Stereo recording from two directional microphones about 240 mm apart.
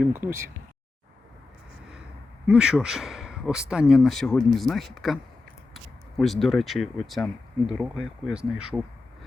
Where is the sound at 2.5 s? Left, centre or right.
Centre.